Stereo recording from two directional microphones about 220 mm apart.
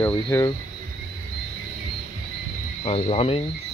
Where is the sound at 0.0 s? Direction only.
15° left (ahead or behind).